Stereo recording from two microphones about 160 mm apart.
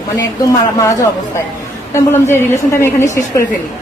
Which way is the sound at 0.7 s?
20° left (ahead or behind).